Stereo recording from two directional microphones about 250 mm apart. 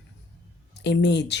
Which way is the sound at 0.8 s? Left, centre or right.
Left.